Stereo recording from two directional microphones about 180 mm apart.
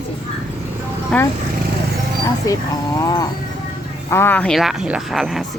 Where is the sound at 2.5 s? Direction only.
20° left (ahead or behind).